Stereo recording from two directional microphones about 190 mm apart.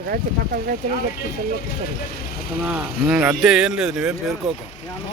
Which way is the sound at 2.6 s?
5° right (ahead or behind).